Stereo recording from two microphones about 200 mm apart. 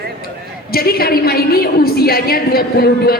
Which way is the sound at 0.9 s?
50° left (ahead or behind).